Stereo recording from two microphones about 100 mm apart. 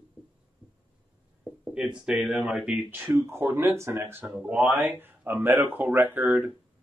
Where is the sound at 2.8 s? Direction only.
20° right (ahead or behind).